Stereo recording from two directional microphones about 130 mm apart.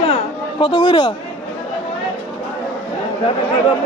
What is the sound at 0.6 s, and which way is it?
Speech, 40° left (ahead or behind).